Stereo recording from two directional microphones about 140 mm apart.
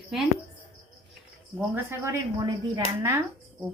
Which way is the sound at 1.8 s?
25° right (ahead or behind).